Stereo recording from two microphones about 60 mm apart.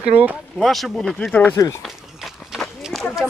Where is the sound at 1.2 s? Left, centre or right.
Left.